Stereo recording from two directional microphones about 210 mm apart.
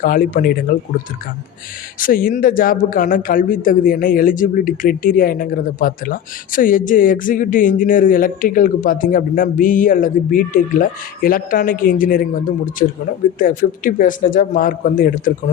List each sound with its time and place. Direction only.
0.0 s speech: 40° left (ahead or behind)
2.0 s speech: 40° left (ahead or behind)